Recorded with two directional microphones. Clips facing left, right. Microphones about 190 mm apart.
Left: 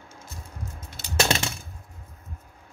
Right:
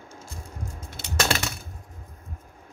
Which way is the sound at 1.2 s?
25° left (ahead or behind).